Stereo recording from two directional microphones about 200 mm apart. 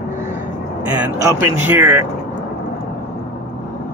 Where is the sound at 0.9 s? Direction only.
10° right (ahead or behind).